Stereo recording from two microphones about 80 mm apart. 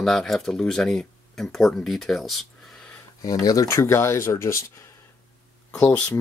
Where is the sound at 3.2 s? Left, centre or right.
Left.